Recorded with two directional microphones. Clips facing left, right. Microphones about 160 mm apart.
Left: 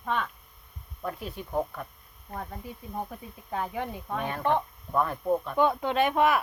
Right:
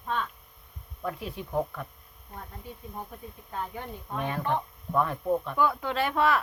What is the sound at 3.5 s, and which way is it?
Speech, 90° left.